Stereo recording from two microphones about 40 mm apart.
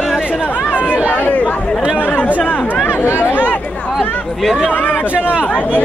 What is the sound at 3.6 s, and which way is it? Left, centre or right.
Chatter, left.